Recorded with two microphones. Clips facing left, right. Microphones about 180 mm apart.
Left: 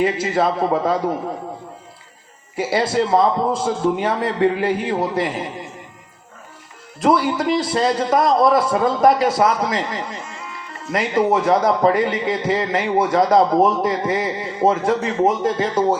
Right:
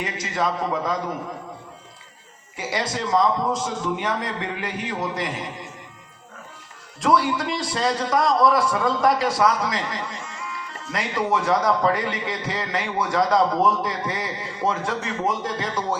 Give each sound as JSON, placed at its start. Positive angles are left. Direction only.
{"t": 0.4, "sound": "a man's voice", "side_deg": 30}
{"t": 2.6, "sound": "a man's voice", "side_deg": 30}
{"t": 7.0, "sound": "a man's voice", "side_deg": 25}